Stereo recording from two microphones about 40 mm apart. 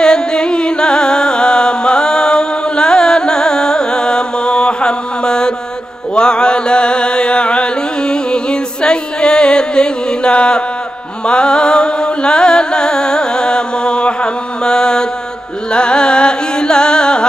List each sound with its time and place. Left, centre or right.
0.0 s music: centre
6.1 s chant: left
11.2 s music: left
15.7 s carnatic music: left